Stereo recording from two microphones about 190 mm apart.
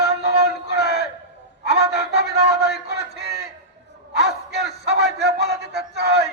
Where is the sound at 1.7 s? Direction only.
60° right (ahead or behind).